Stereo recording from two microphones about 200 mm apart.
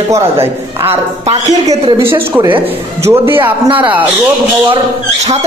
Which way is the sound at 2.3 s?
10° right (ahead or behind).